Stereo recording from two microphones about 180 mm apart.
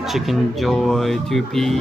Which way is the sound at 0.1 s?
Centre (ahead or behind).